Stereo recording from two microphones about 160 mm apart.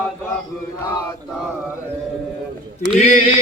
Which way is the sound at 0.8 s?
20° left (ahead or behind).